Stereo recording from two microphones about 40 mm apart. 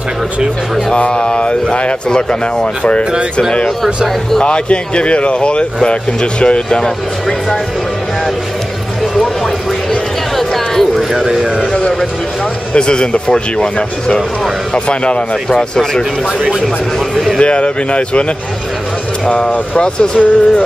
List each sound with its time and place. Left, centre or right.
0.9 s speech: left
2.8 s speech: left
4.4 s speech: left
6.8 s speech: centre
9.2 s a sound: centre
11.1 s speech: centre
12.7 s speech: left
15.8 s speech: centre
17.4 s speech: left
19.2 s speech: left